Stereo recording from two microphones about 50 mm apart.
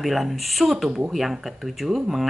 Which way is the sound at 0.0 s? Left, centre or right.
Centre.